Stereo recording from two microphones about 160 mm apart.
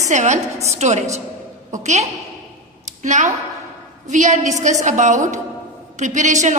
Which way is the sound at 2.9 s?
50° right (ahead or behind).